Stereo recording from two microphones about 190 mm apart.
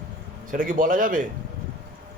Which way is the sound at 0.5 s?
45° right (ahead or behind).